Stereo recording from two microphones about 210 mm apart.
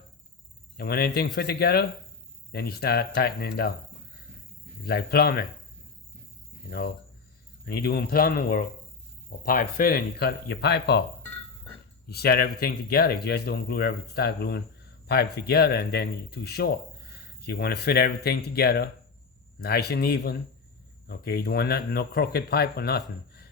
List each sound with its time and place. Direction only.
0.8 s speech: 45° left (ahead or behind)
4.9 s speech: 50° left (ahead or behind)
6.7 s speech: 50° left (ahead or behind)
12.0 s speech: 50° left (ahead or behind)